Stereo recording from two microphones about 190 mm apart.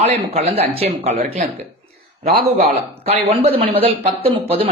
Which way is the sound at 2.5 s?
30° right (ahead or behind).